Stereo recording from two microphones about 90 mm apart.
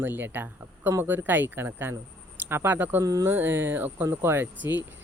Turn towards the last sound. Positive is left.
turn(degrees=-20)  # may be behind; listen again after turning